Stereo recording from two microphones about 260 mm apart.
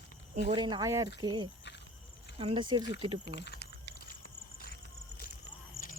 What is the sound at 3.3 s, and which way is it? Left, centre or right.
Speech, left.